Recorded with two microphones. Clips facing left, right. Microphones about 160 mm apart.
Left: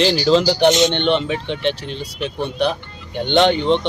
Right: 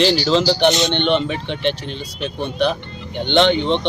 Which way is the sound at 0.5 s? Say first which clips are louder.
Left 2 dB; 15° left (ahead or behind).